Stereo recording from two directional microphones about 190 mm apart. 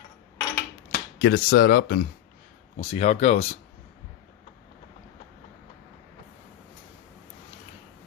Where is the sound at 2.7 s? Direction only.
35° left (ahead or behind).